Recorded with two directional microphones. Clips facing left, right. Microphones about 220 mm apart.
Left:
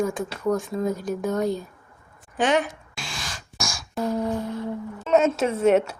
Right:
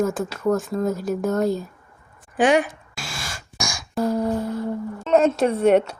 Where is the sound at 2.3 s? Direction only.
10° right (ahead or behind).